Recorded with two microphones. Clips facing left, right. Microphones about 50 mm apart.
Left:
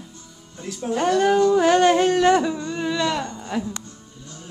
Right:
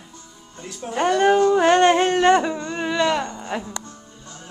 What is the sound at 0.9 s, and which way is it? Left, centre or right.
Speech, centre.